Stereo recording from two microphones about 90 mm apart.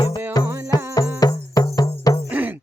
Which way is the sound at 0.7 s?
45° left (ahead or behind).